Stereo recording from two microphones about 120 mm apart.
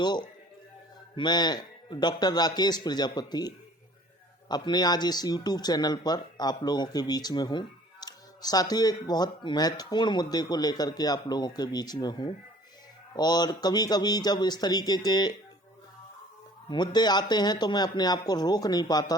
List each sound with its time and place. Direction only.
0.0 s speech: 35° left (ahead or behind)
16.6 s speech: 40° left (ahead or behind)